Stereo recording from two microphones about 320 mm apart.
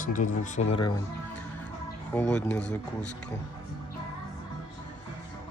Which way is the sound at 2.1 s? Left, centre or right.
Centre.